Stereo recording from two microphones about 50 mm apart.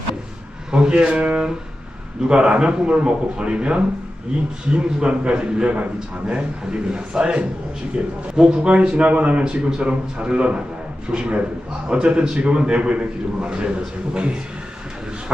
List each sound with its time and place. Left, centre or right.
0.7 s a man's voice: centre